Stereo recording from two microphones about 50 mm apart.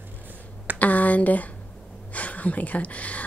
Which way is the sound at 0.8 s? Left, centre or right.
Left.